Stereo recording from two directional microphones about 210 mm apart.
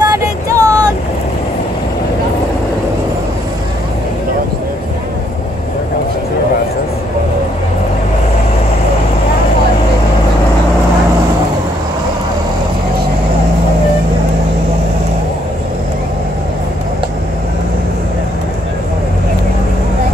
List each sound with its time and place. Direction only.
0.0 s vehicle: 15° right (ahead or behind)